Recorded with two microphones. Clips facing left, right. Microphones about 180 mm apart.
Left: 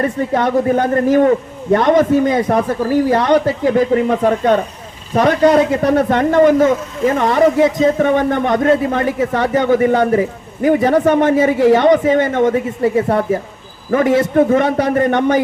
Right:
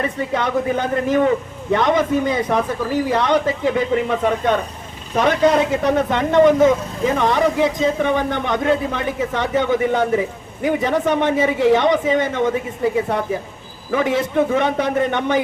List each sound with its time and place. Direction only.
0.0 s speech: 50° left (ahead or behind)